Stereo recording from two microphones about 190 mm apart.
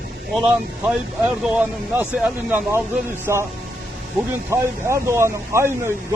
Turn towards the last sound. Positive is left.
turn(degrees=-15)  # may be behind; listen again after turning